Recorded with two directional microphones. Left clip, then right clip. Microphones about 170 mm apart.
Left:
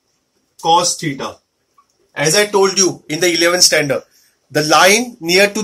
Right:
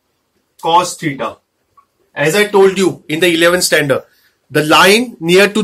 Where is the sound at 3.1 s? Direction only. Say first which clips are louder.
Right 6 dB; 40° right (ahead or behind).